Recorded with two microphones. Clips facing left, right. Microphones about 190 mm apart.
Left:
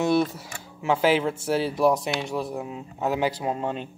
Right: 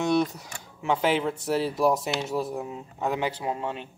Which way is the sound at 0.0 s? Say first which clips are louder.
Left 2 dB; 5° left (ahead or behind).